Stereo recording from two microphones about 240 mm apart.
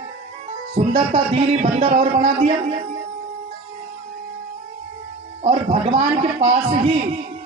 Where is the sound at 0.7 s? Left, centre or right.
Right.